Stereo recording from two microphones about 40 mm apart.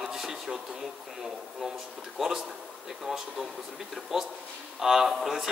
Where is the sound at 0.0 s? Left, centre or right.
Centre.